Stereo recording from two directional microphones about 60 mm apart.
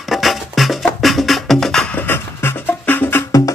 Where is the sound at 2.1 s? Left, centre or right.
Left.